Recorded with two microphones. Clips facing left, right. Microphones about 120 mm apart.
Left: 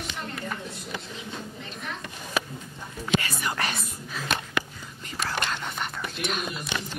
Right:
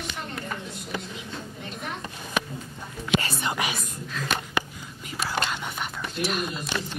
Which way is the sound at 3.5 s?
10° right (ahead or behind).